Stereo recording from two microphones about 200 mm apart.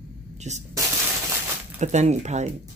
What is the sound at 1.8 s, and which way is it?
Speech, 35° right (ahead or behind).